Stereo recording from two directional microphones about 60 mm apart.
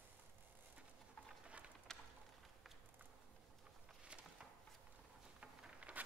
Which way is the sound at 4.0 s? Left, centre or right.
Centre.